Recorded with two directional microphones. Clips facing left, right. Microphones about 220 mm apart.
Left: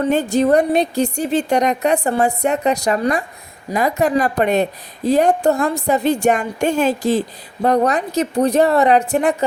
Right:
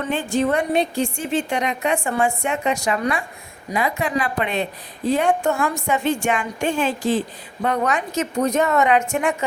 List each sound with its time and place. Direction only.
0.0 s a woman's voice: 40° left (ahead or behind)